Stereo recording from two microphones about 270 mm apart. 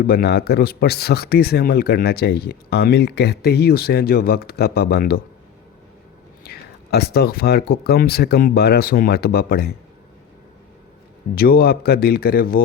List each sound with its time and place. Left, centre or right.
0.1 s speech: left
6.4 s speech: left
11.3 s speech: left